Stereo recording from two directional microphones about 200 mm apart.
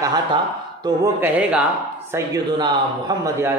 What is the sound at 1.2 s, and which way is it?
Speech, 5° right (ahead or behind).